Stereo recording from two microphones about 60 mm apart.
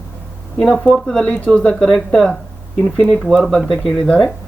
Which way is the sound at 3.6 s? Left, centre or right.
Centre.